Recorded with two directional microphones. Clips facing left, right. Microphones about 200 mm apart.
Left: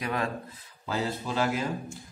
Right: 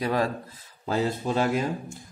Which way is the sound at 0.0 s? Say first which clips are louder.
Right 5 dB; 35° right (ahead or behind).